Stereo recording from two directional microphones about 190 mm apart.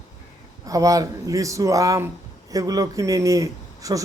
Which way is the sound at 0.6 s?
15° right (ahead or behind).